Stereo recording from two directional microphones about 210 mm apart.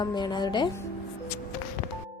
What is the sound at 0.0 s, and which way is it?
Speech, 20° left (ahead or behind).